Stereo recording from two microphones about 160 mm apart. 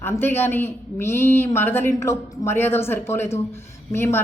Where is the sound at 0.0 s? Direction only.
15° left (ahead or behind).